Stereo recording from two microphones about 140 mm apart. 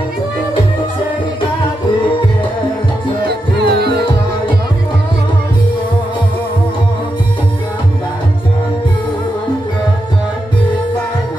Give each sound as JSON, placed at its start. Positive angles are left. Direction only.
{"t": 3.2, "sound": "music", "side_deg": 35}